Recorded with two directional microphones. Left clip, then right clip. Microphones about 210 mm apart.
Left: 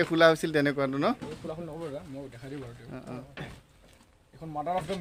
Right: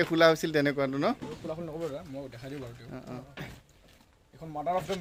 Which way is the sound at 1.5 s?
25° right (ahead or behind).